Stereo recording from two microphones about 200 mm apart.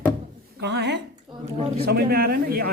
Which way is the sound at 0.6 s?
60° right (ahead or behind).